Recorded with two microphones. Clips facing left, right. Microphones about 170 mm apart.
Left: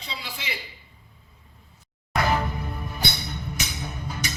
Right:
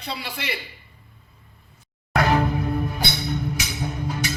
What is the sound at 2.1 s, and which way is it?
Music, 65° right (ahead or behind).